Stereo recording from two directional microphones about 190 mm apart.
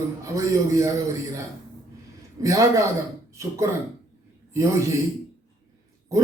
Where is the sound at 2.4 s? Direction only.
15° right (ahead or behind).